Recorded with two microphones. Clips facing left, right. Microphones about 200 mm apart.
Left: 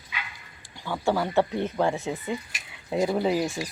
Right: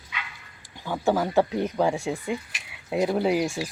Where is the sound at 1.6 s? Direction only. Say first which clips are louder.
Right 1 dB; centre (ahead or behind).